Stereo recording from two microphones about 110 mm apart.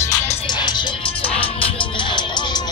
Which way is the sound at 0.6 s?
45° left (ahead or behind).